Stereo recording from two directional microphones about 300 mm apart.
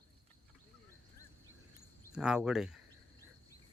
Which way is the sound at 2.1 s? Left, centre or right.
Centre.